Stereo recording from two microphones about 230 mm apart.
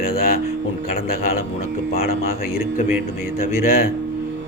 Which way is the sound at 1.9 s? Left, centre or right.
Left.